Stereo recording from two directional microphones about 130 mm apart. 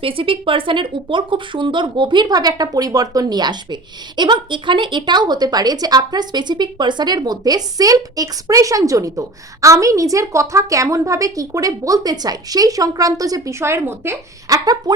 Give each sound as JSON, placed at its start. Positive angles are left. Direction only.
{"t": 0.0, "sound": "speech", "side_deg": -45}
{"t": 14.6, "sound": "speech", "side_deg": -30}